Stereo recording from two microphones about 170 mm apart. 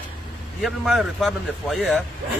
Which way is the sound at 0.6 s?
Centre (ahead or behind).